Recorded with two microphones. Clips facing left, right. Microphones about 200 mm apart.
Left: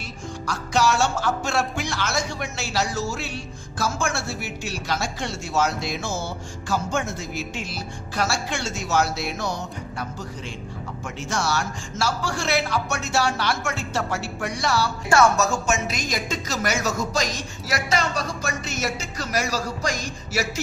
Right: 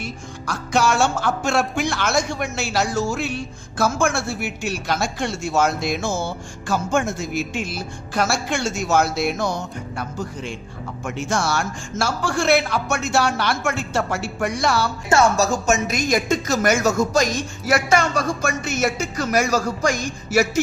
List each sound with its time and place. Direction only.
0.4 s speech: 55° right (ahead or behind)
15.1 s speech: 25° right (ahead or behind)
15.6 s speech: 45° right (ahead or behind)